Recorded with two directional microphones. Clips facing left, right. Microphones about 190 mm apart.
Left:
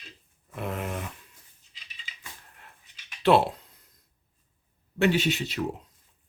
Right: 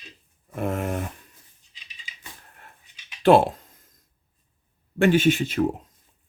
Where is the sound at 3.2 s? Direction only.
50° right (ahead or behind).